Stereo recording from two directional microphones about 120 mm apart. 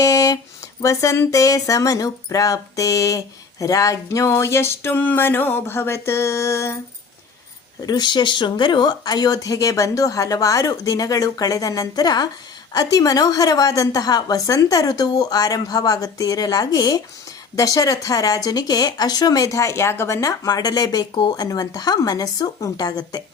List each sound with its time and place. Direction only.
0.0 s a sound: 30° left (ahead or behind)
0.8 s speech: 25° left (ahead or behind)
7.9 s speech: 35° left (ahead or behind)